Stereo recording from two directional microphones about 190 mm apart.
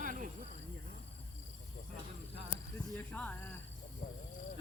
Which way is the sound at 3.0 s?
10° left (ahead or behind).